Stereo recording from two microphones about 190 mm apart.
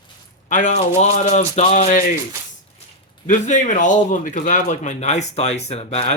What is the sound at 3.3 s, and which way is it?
A man's voice, 40° left (ahead or behind).